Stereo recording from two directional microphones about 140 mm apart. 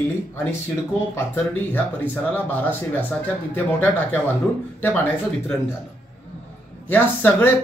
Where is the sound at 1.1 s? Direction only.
15° left (ahead or behind).